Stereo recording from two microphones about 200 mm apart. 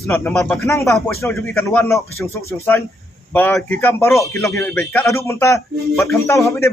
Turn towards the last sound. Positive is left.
turn(degrees=15)  # may be behind; listen again after turning